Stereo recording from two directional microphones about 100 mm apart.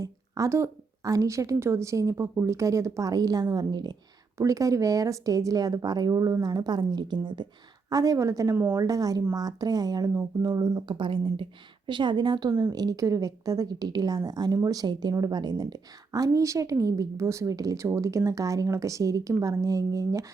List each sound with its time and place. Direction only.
0.0 s a woman's voice: 35° right (ahead or behind)
4.4 s a woman's voice: 35° right (ahead or behind)
7.9 s a woman's voice: 35° right (ahead or behind)
10.8 s a woman's voice: 55° right (ahead or behind); by 20.2 s 35° right (ahead or behind)